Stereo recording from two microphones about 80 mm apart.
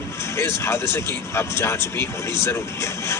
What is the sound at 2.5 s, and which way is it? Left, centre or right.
Speech, left.